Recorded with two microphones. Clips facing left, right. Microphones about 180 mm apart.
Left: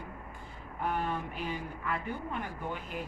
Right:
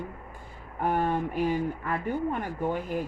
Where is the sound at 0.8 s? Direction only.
50° right (ahead or behind).